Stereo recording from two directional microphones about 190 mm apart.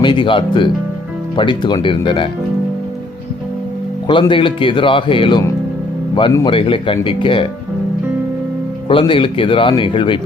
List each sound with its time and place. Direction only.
0.0 s speech: 25° left (ahead or behind)
4.0 s speech: 25° left (ahead or behind)
8.9 s speech: 25° left (ahead or behind)